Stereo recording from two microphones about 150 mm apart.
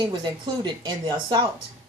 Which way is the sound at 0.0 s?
30° right (ahead or behind).